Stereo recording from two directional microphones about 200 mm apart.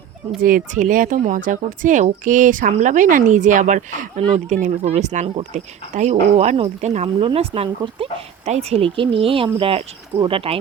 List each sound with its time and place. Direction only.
0.4 s speech: 40° right (ahead or behind)